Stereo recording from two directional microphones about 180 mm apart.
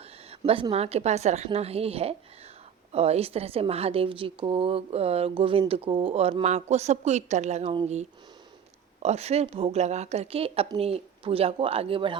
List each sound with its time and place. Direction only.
0.0 s a woman's voice: 35° right (ahead or behind)